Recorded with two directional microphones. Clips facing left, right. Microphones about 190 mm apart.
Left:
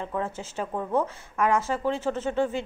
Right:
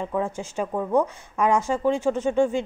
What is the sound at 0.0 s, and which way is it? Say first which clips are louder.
A woman's voice: right 4 dB; 15° right (ahead or behind).